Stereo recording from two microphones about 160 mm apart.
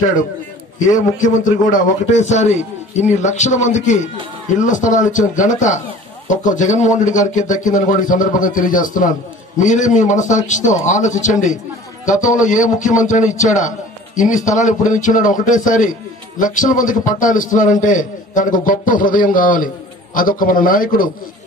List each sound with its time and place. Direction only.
0.8 s a man's voice: 55° left (ahead or behind)